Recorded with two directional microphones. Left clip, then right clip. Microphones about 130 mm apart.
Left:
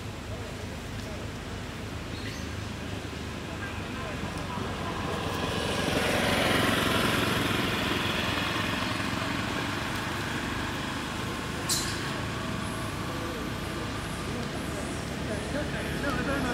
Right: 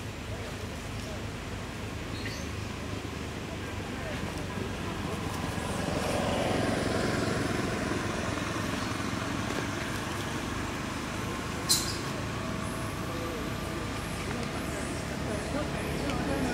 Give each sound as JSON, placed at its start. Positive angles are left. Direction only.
{"t": 5.9, "sound": "vehicle", "side_deg": 45}